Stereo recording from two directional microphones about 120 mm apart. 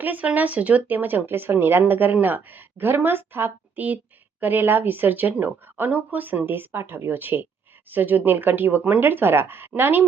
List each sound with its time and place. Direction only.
0.0 s speech: 15° right (ahead or behind)